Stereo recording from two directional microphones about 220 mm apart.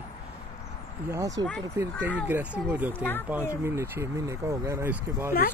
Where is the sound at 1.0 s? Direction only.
15° right (ahead or behind).